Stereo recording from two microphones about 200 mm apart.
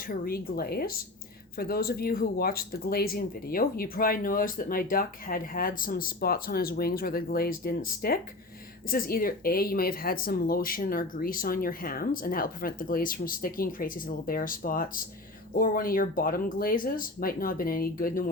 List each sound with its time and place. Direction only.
0.1 s speech: 50° left (ahead or behind)